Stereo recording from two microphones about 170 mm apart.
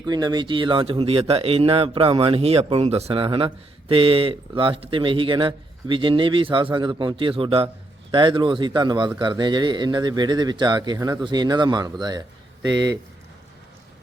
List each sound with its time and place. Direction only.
0.0 s a man's voice: 25° right (ahead or behind)